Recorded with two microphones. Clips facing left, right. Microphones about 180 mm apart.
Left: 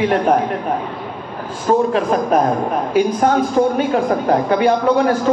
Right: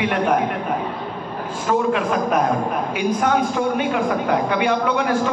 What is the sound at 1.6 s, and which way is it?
Speech, 35° left (ahead or behind).